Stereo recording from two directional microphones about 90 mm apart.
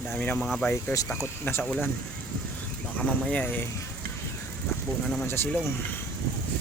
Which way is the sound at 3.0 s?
15° left (ahead or behind).